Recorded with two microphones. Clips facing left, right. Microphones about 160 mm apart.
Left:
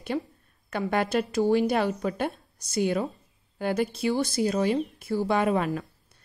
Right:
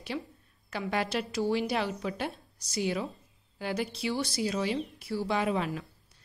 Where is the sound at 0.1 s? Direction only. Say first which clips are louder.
Left 6 dB; 45° left (ahead or behind).